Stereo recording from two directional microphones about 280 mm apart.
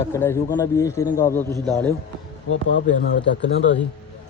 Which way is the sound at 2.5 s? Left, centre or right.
Left.